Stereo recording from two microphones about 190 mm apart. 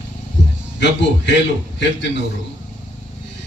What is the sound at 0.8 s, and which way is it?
Speech, 65° left (ahead or behind).